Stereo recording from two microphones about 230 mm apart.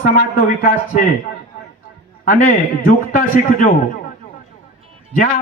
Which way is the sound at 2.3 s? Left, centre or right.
Left.